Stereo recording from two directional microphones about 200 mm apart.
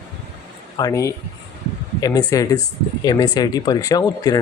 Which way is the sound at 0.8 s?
15° left (ahead or behind).